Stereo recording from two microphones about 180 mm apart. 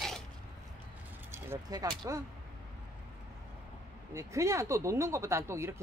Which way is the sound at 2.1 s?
15° right (ahead or behind).